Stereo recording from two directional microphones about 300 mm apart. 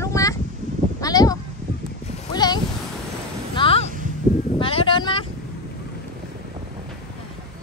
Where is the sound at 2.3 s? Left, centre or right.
Centre.